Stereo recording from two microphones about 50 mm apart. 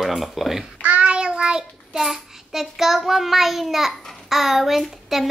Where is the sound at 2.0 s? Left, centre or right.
Centre.